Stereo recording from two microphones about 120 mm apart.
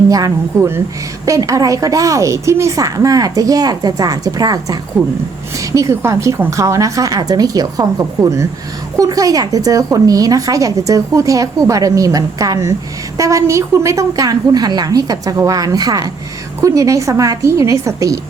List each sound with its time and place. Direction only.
0.1 s a woman's voice: 30° right (ahead or behind)